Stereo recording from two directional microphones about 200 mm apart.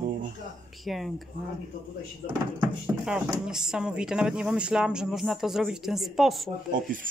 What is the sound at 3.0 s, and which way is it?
Speech, 5° right (ahead or behind).